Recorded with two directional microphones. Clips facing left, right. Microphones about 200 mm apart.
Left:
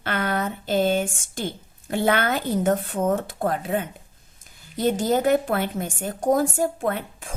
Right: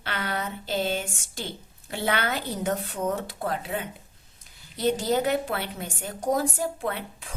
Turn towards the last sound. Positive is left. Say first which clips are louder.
# left 5 dB
turn(degrees=50)  # may be behind; listen again after turning